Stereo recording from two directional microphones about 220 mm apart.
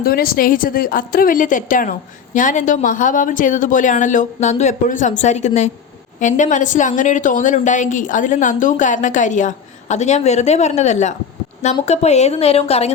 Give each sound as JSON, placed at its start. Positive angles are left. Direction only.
{"t": 0.0, "sound": "a woman's voice", "side_deg": 40}